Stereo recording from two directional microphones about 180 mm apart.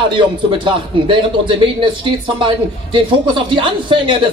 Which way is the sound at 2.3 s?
25° right (ahead or behind).